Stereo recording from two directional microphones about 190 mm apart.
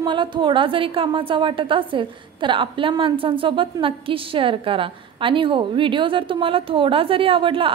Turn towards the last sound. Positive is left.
turn(degrees=-25)  # may be behind; listen again after turning